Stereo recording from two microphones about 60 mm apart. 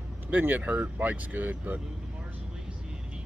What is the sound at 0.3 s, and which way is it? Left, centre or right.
Speech, right.